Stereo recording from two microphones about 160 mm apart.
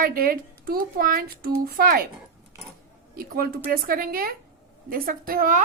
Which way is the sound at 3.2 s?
70° right (ahead or behind).